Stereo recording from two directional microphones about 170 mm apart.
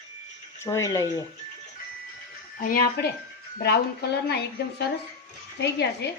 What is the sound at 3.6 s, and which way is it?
Speech, 70° left (ahead or behind).